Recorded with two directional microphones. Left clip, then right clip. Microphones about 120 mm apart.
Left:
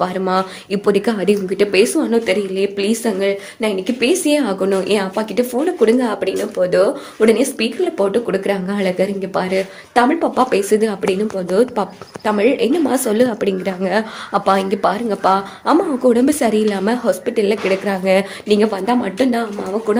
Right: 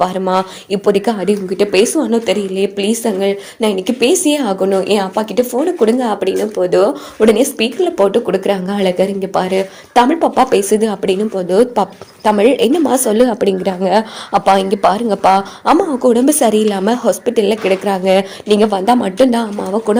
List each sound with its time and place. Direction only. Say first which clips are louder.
0.0 s speech: right 3 dB; 30° right (ahead or behind)
3.6 s speech: right 5 dB; 55° right (ahead or behind); by 4.5 s 35° right (ahead or behind)
4.6 s speech: right 3 dB; 20° right (ahead or behind); by 13.0 s 45° right (ahead or behind)
13.1 s speech: right 4 dB; 35° right (ahead or behind)
15.1 s speech: right 4 dB; 50° right (ahead or behind); by 18.6 s 25° right (ahead or behind)
18.7 s speech: right 5 dB; 75° right (ahead or behind)
19.1 s speech: right 5 dB; 45° right (ahead or behind)